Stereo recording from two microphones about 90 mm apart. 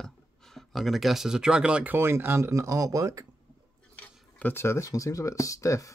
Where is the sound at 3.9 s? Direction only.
15° left (ahead or behind).